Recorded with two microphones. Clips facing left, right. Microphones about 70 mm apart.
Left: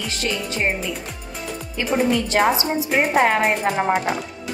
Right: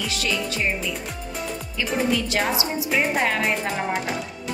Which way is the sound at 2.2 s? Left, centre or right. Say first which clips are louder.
Left 5 dB; left.